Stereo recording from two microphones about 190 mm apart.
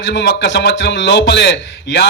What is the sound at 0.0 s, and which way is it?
A man's voice, 65° left (ahead or behind).